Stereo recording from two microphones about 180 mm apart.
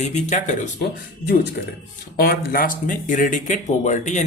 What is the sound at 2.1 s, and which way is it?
Speech, 55° left (ahead or behind).